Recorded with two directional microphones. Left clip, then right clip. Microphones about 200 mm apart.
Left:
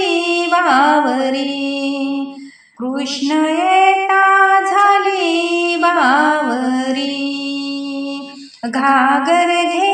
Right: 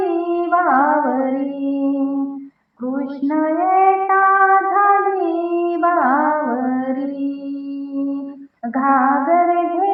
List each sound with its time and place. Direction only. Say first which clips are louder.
0.0 s music: left 3 dB; 45° left (ahead or behind)
3.2 s female singing: left 2 dB; 40° left (ahead or behind)
8.7 s music: left 3 dB; 45° left (ahead or behind)